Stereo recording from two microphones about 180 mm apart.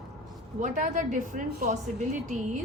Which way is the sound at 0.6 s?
45° right (ahead or behind).